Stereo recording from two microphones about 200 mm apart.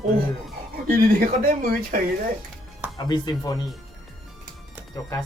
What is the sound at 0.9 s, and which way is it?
Speech, 45° right (ahead or behind).